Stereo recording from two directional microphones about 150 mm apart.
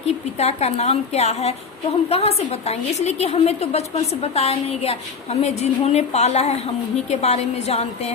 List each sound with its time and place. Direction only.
0.0 s a woman's voice: 45° left (ahead or behind)